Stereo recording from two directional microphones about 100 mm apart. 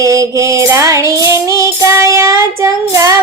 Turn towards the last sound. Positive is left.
turn(degrees=-35)  # may be behind; listen again after turning